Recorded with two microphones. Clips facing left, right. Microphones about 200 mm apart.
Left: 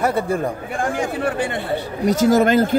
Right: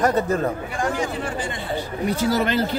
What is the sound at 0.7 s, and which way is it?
Chatter, 55° left (ahead or behind).